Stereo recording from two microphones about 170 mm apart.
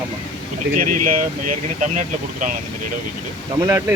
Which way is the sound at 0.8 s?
50° right (ahead or behind).